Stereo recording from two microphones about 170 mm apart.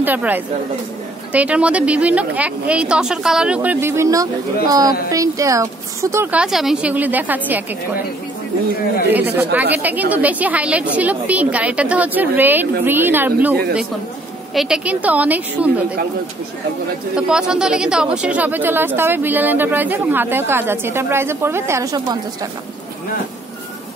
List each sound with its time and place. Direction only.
0.0 s a woman's voice: 10° right (ahead or behind)
6.4 s speech: 5° right (ahead or behind)
9.1 s speech: 10° right (ahead or behind)
17.1 s a woman's voice: 5° right (ahead or behind); by 22.5 s 20° right (ahead or behind)